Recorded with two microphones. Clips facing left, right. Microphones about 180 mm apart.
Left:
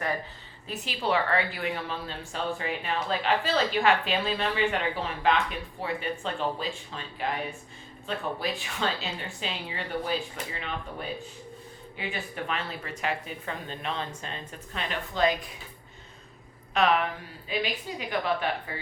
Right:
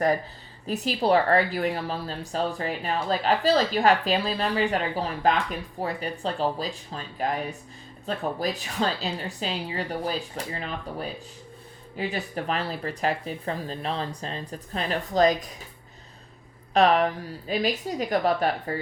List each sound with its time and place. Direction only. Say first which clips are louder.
0.7 s speech: right 6 dB; 40° right (ahead or behind)
16.7 s speech: right 5 dB; 35° right (ahead or behind)